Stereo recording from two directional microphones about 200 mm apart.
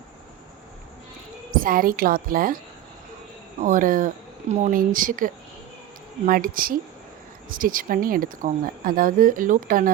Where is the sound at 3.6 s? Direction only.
40° right (ahead or behind).